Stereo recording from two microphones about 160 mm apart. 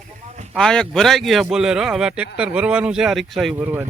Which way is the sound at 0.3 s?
45° right (ahead or behind).